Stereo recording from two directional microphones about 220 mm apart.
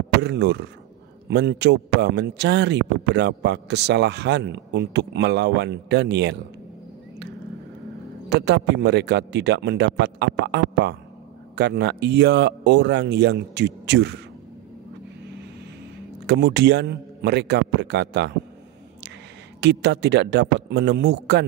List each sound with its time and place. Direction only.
0.2 s a man's voice: 50° right (ahead or behind)
8.3 s a man's voice: 50° right (ahead or behind)
16.3 s a man's voice: 50° right (ahead or behind)
19.6 s a man's voice: 50° right (ahead or behind)